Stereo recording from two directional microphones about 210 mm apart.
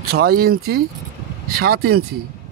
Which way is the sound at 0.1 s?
45° right (ahead or behind).